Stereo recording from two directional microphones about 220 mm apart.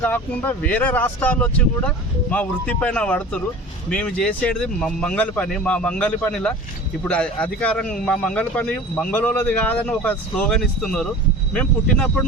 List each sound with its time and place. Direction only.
0.0 s a man's voice: 10° left (ahead or behind)